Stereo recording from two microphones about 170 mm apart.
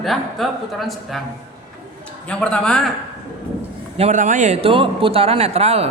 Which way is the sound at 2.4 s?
5° left (ahead or behind).